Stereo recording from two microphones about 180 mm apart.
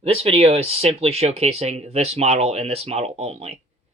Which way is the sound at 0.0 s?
35° right (ahead or behind).